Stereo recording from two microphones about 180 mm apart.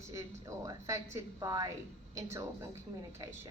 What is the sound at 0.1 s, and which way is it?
A woman's voice, 15° right (ahead or behind).